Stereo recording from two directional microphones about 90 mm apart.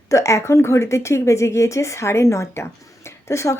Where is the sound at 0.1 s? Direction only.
35° left (ahead or behind).